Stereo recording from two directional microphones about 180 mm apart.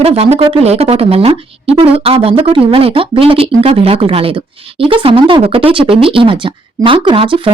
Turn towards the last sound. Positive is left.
turn(degrees=-30)  # may be behind; listen again after turning